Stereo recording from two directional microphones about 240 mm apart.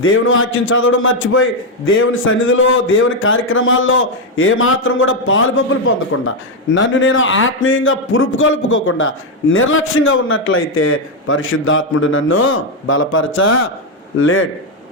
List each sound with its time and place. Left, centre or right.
0.0 s a man's voice: left